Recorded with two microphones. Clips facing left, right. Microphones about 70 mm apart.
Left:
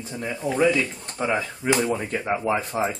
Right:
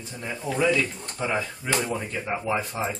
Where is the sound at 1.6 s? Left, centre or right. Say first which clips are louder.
Left 5 dB; left.